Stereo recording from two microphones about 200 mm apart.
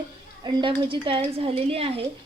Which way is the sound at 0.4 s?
25° right (ahead or behind).